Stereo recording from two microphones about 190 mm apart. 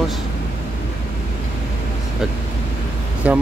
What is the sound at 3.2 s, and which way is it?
Speech, 5° right (ahead or behind).